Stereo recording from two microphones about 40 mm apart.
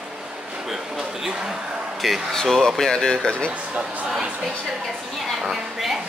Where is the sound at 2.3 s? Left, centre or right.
Centre.